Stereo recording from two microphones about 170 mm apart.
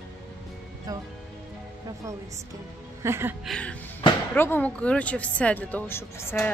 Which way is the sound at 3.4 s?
5° left (ahead or behind).